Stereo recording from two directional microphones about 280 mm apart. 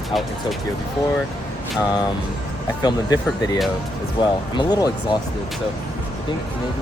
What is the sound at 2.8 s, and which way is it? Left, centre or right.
Speech, centre.